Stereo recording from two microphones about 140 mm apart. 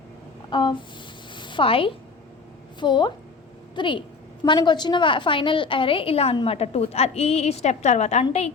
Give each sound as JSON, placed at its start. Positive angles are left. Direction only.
{"t": 0.5, "sound": "a woman's voice", "side_deg": 35}
{"t": 1.3, "sound": "a sound", "side_deg": 35}
{"t": 2.8, "sound": "a woman's voice", "side_deg": 35}